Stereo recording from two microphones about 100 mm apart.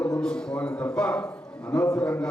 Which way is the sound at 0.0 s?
10° left (ahead or behind).